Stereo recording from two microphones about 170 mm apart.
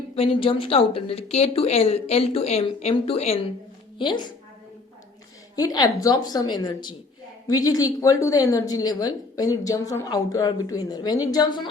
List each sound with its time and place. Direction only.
0.2 s a woman's voice: 30° left (ahead or behind)
5.5 s a woman's voice: 20° left (ahead or behind)